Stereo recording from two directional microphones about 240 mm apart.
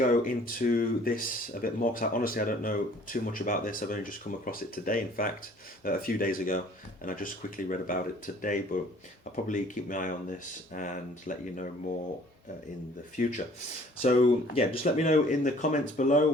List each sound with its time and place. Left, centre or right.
0.0 s speech: left
13.2 s speech: left